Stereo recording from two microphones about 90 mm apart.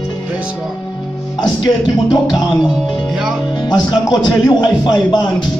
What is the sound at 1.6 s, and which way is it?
A man's voice, 50° left (ahead or behind).